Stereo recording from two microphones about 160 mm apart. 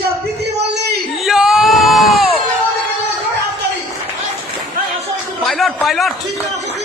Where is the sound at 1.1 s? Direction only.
Centre (ahead or behind).